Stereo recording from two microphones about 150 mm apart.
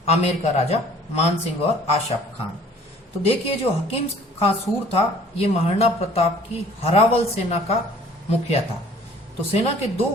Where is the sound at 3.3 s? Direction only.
40° left (ahead or behind).